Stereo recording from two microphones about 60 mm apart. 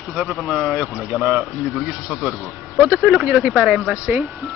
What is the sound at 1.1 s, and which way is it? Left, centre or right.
Mantra, right.